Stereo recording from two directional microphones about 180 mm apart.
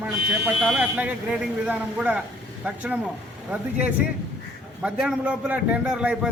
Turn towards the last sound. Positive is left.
turn(degrees=-5)  # may be behind; listen again after turning